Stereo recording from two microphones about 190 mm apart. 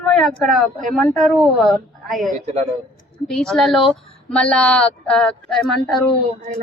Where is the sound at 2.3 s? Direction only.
40° right (ahead or behind).